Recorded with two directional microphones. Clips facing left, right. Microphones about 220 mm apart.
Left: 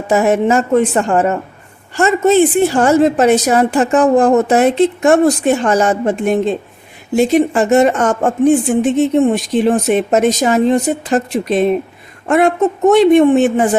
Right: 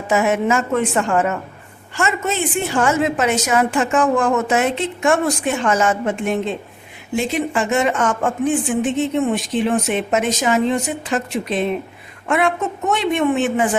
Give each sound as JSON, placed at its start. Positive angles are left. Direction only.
{"t": 0.1, "sound": "a woman's voice", "side_deg": 35}